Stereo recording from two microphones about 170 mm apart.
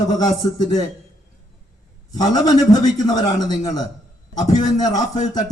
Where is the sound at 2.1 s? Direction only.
25° left (ahead or behind).